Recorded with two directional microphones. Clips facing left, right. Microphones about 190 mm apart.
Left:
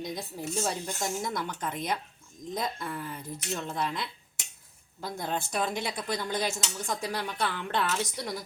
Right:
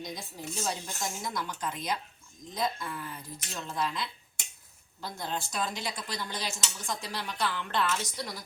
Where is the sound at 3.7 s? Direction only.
55° left (ahead or behind).